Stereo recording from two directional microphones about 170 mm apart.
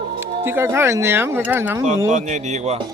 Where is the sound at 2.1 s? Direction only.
45° right (ahead or behind).